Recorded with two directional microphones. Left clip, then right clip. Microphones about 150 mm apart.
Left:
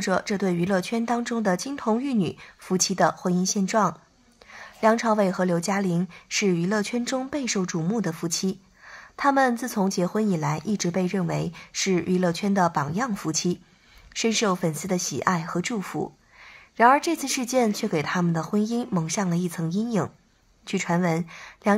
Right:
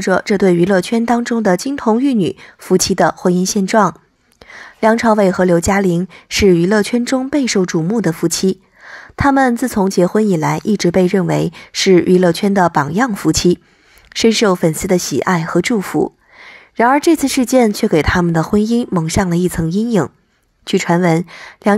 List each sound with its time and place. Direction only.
0.0 s a woman's voice: 40° right (ahead or behind)